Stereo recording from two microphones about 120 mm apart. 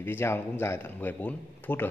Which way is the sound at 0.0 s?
20° left (ahead or behind).